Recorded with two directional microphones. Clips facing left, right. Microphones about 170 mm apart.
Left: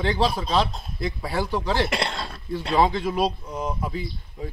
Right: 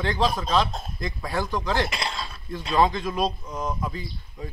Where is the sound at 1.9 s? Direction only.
65° left (ahead or behind).